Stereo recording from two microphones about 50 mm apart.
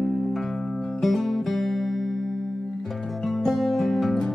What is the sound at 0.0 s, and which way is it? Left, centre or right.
Music, centre.